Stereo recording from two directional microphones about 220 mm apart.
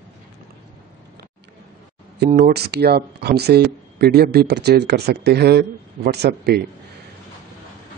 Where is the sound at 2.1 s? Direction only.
45° right (ahead or behind).